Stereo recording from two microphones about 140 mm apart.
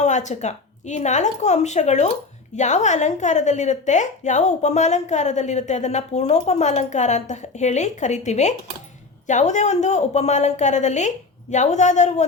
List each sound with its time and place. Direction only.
0.0 s a woman's voice: 55° left (ahead or behind)